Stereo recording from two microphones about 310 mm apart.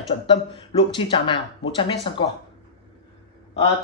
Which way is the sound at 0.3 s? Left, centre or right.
Centre.